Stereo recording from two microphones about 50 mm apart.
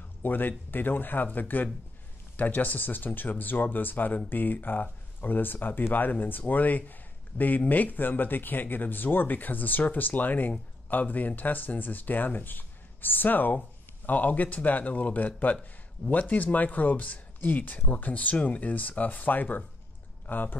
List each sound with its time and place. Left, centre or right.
0.2 s speech: left